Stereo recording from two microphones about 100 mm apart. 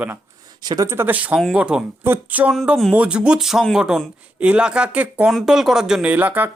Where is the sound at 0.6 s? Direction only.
40° right (ahead or behind).